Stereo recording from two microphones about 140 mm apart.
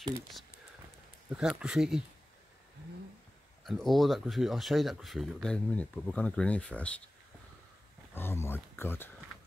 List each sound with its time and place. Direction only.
1.3 s speech: 5° right (ahead or behind)
3.6 s speech: centre (ahead or behind)
8.1 s speech: 15° left (ahead or behind)